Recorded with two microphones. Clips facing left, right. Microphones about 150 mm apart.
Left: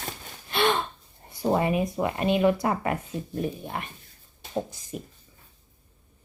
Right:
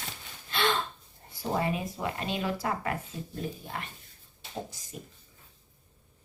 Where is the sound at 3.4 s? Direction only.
60° left (ahead or behind).